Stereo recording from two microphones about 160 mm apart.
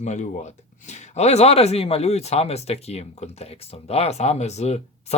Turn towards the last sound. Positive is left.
turn(degrees=45)  # may be behind; listen again after turning